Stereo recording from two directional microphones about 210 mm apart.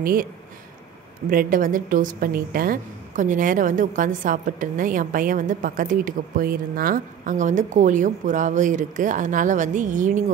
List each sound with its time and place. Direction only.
0.0 s speech: 45° right (ahead or behind)
1.3 s a woman's voice: 40° right (ahead or behind)